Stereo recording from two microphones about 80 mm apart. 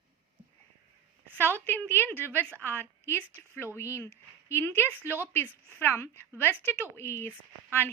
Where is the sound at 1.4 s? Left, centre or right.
Left.